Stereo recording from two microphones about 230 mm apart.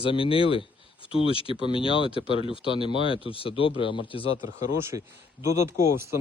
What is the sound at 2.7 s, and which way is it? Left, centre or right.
Speech, right.